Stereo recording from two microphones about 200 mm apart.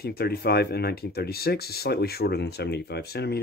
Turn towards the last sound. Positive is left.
turn(degrees=55)  # may be behind; listen again after turning